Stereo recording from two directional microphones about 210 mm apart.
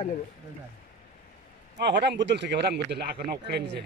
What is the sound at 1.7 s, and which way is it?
Speech, 55° right (ahead or behind).